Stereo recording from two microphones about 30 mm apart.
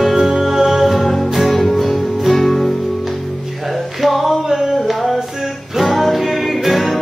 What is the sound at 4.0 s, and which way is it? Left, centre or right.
Music, centre.